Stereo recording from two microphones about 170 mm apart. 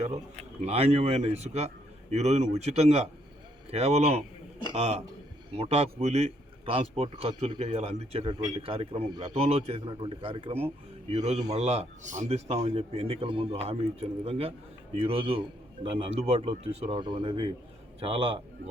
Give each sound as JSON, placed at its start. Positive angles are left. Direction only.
{"t": 0.6, "sound": "a man's voice", "side_deg": -35}